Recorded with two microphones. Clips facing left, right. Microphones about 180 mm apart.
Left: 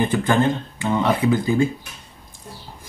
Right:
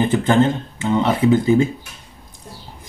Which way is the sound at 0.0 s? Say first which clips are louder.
Right 3 dB; 25° right (ahead or behind).